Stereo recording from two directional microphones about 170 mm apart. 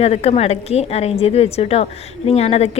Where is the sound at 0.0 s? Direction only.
40° left (ahead or behind).